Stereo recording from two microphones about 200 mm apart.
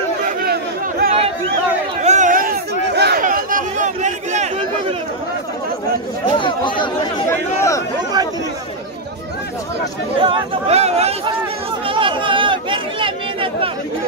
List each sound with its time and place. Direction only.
0.5 s chatter: 50° right (ahead or behind)
2.0 s a sound: 40° right (ahead or behind)
6.3 s speech: 25° left (ahead or behind)
10.2 s speech: 25° right (ahead or behind)
11.9 s chatter: 25° right (ahead or behind)